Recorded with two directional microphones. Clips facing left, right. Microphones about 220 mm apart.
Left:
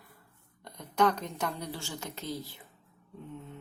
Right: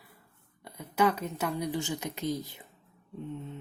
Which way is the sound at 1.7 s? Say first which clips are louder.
Right 7 dB; 20° right (ahead or behind).